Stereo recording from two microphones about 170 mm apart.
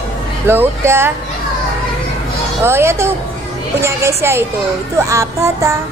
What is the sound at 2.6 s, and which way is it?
Music, 15° right (ahead or behind).